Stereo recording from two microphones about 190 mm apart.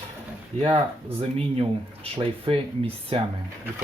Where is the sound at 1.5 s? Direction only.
30° right (ahead or behind).